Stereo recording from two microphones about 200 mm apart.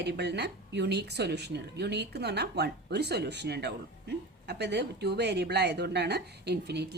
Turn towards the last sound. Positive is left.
turn(degrees=-55)  # may be behind; listen again after turning